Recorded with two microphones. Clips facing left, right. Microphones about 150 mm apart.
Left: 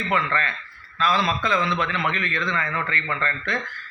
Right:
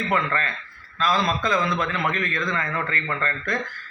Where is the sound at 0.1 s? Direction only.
45° right (ahead or behind).